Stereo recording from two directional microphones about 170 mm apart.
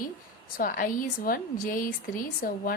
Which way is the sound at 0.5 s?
55° left (ahead or behind).